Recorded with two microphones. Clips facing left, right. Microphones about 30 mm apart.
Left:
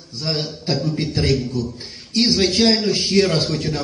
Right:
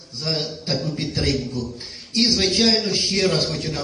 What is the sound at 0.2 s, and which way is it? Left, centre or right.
A man's voice, centre.